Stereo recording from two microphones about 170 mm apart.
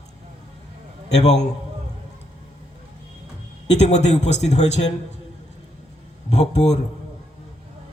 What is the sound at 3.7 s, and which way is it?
Speech, 40° left (ahead or behind).